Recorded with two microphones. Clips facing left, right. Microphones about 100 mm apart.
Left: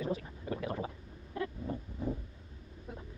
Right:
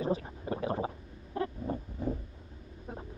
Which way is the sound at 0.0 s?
30° right (ahead or behind).